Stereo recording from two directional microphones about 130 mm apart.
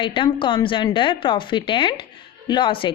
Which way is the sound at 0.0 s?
40° left (ahead or behind).